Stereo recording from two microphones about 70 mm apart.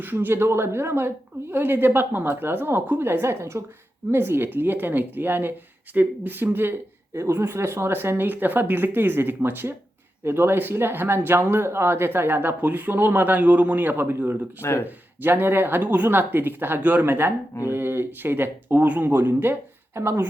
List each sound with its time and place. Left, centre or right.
0.0 s speech: right
14.6 s speech: left
14.8 s speech: right